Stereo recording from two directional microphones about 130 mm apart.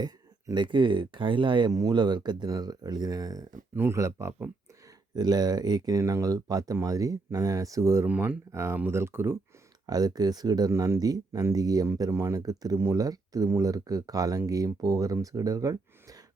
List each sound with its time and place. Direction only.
0.0 s speech: 35° right (ahead or behind)
9.8 s speech: 30° right (ahead or behind)